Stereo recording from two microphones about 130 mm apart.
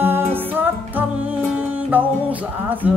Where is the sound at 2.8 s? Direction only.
10° right (ahead or behind).